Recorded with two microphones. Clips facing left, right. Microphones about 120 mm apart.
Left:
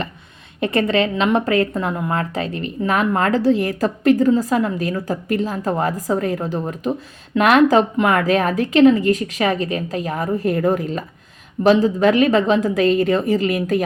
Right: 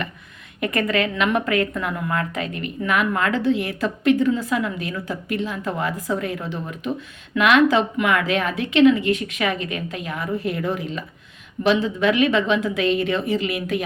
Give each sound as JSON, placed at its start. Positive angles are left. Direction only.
{"t": 0.6, "sound": "a woman's voice", "side_deg": 30}